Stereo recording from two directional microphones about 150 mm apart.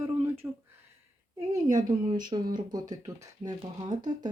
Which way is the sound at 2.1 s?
30° right (ahead or behind).